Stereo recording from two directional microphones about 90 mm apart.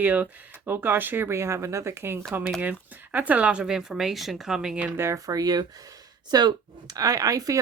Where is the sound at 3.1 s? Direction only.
15° right (ahead or behind).